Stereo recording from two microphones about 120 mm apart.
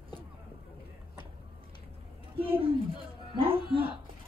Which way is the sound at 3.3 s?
50° right (ahead or behind).